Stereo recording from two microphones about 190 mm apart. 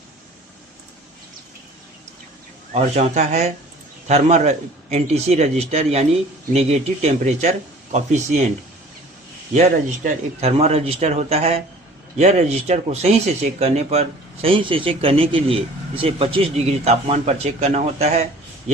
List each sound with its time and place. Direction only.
2.7 s speech: 40° right (ahead or behind)
9.6 s speech: 35° right (ahead or behind)